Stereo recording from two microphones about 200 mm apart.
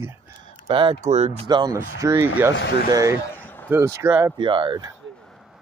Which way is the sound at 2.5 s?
60° left (ahead or behind).